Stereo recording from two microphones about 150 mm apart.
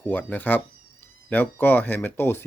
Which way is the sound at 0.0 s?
10° left (ahead or behind).